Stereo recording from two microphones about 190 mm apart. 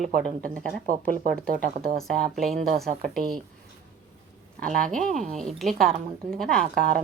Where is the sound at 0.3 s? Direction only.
45° right (ahead or behind).